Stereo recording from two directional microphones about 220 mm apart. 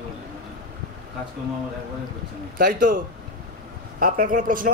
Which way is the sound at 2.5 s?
40° right (ahead or behind).